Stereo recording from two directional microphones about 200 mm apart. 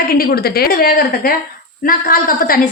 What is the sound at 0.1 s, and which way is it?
A woman's voice, 50° left (ahead or behind).